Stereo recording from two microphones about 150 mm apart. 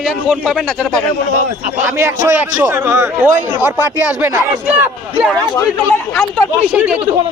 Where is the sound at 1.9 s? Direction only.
20° right (ahead or behind).